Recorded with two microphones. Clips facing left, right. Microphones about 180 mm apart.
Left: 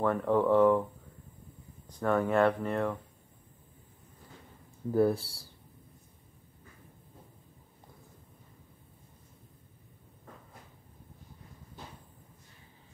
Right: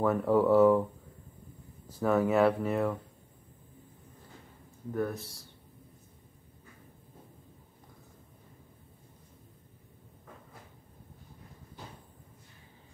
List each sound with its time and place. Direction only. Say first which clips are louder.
0.0 s speech: right 2 dB; 5° right (ahead or behind)
1.9 s speech: right 2 dB; 5° right (ahead or behind)
4.9 s speech: left 7 dB; 30° left (ahead or behind)